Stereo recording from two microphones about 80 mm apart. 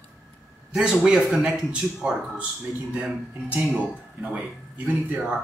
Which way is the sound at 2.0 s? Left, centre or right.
Centre.